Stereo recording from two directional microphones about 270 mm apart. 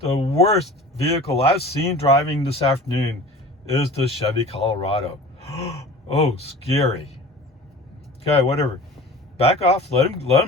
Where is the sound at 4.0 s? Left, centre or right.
Left.